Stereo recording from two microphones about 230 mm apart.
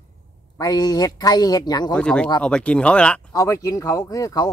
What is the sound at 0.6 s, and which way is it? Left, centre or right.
Speech, centre.